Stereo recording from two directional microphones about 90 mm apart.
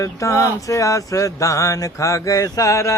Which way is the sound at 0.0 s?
35° left (ahead or behind).